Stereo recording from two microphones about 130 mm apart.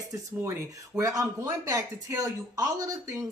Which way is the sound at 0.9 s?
25° right (ahead or behind).